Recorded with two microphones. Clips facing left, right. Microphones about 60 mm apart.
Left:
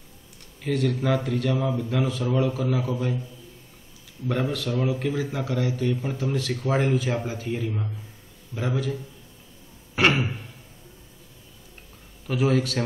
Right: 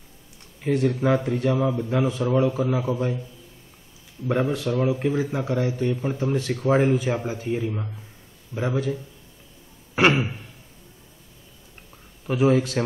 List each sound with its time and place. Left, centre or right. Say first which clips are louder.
0.6 s a man's voice: right 3 dB; centre
4.3 s a man's voice: right 3 dB; right
12.3 s a man's voice: right 3 dB; right